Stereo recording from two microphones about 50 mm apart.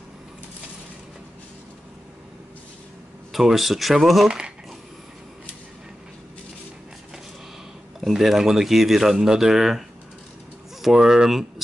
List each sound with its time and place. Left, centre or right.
3.3 s speech: centre
8.1 s speech: centre